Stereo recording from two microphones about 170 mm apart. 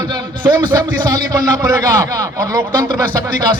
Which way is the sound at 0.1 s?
25° right (ahead or behind).